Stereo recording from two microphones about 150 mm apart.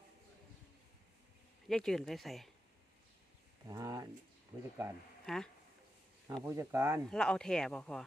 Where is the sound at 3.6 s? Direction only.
20° right (ahead or behind).